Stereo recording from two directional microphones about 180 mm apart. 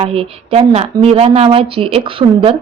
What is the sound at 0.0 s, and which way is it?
A woman's voice, 35° right (ahead or behind).